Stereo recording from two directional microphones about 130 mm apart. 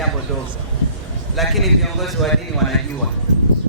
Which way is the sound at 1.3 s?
Centre (ahead or behind).